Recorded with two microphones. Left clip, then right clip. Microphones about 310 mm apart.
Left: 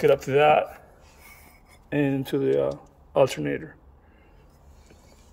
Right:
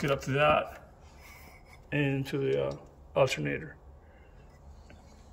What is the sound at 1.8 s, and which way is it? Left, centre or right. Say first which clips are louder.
Speech: left 6 dB; centre.